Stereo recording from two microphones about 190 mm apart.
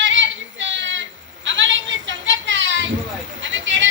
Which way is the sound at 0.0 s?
80° right.